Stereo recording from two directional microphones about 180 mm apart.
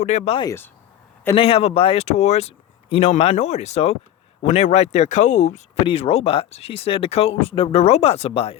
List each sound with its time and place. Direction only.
0.0 s speech: 40° left (ahead or behind)
1.4 s speech: 30° left (ahead or behind)